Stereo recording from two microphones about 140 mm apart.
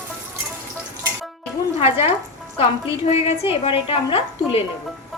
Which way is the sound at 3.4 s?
40° left (ahead or behind).